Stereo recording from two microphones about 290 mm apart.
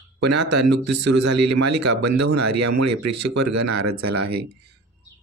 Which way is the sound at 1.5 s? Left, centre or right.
Right.